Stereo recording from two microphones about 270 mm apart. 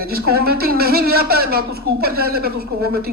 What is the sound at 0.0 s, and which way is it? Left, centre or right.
Speech, right.